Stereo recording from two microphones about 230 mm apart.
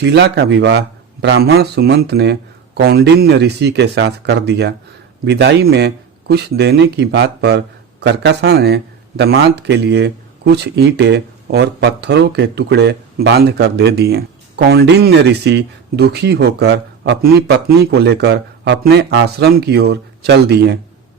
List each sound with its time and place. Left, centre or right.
0.0 s a man's voice: right